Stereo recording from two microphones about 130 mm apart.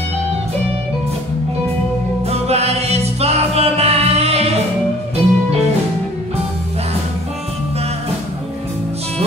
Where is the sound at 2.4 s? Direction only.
55° right (ahead or behind).